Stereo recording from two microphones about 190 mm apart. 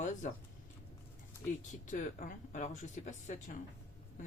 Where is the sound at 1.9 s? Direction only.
45° left (ahead or behind).